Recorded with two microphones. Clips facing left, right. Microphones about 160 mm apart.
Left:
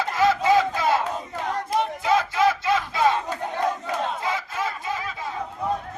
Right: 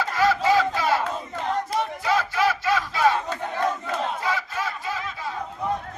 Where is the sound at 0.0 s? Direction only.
20° left (ahead or behind).